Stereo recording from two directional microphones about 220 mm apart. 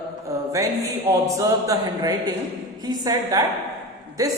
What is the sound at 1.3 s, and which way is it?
A man's voice, 15° right (ahead or behind).